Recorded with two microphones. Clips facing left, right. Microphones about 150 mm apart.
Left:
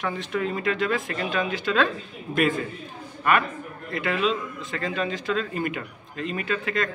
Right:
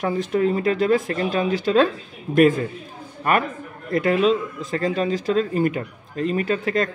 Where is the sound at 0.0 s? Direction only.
40° right (ahead or behind).